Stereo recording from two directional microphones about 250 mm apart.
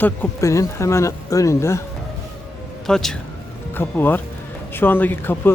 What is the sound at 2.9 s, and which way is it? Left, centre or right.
Speech, centre.